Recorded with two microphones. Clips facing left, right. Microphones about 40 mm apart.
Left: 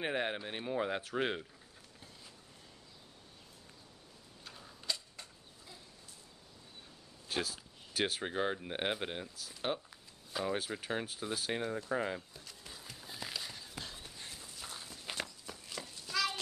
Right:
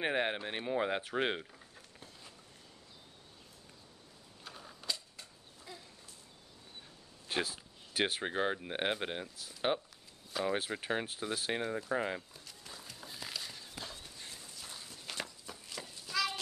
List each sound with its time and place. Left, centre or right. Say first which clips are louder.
0.0 s speech: right 2 dB; centre
4.5 s a sound: right 3 dB; centre
7.2 s speech: right 2 dB; centre
9.7 s speech: right 3 dB; right
10.4 s speech: right 2 dB; centre
12.4 s a sound: even; centre
13.9 s clip-clop: left 1 dB; centre
14.6 s walk: left 4 dB; centre
15.4 s a sound: even; centre